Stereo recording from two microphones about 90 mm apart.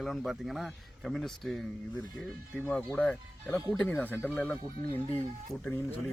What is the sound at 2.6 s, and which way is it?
Speech, 15° left (ahead or behind).